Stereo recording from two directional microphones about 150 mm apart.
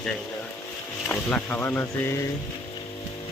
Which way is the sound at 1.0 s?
10° left (ahead or behind).